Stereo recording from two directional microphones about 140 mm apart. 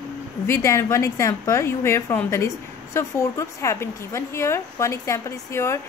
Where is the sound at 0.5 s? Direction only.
20° left (ahead or behind).